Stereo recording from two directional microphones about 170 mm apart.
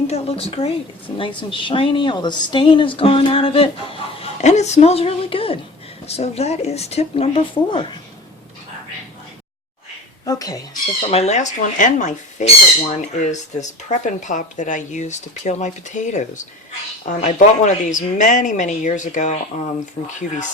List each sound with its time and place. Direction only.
0.1 s a woman's voice: 35° left (ahead or behind)
10.2 s speech: 20° left (ahead or behind)
11.1 s speech: 40° left (ahead or behind)